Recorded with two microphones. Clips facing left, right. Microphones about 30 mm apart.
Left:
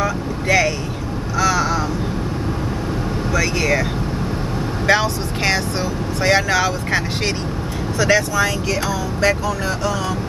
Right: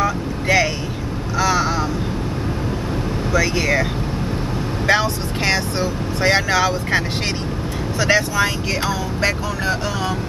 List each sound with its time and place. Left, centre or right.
0.0 s vehicle: centre
3.3 s speech: centre
4.8 s speech: centre
8.0 s speech: centre